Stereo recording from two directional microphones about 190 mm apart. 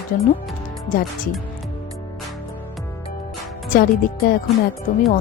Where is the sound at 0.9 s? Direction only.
45° left (ahead or behind).